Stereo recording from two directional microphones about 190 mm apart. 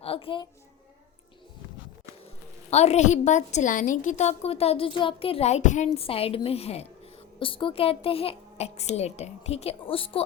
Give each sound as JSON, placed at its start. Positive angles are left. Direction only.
{"t": 0.0, "sound": "a woman's voice", "side_deg": 30}
{"t": 2.6, "sound": "a woman's voice", "side_deg": 35}